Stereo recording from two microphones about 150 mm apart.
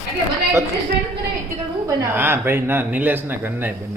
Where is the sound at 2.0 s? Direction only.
15° right (ahead or behind).